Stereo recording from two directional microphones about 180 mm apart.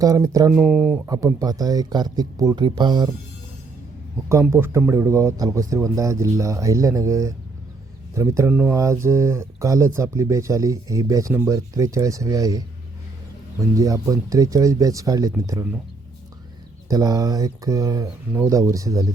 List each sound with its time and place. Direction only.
0.0 s speech: 20° right (ahead or behind)
0.5 s speech: 5° right (ahead or behind)
1.1 s speech: 20° right (ahead or behind)
4.3 s speech: 15° right (ahead or behind)
16.9 s speech: 20° right (ahead or behind)